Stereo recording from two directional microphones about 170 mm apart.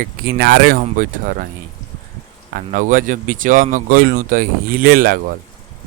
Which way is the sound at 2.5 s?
55° right (ahead or behind).